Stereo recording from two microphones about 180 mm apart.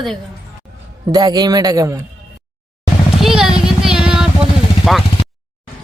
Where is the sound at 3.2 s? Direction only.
Centre (ahead or behind).